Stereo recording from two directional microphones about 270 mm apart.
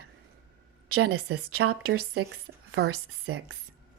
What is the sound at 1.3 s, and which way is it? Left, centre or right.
Speech, right.